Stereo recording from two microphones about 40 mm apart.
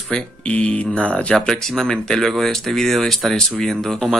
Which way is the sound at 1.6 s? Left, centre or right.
Centre.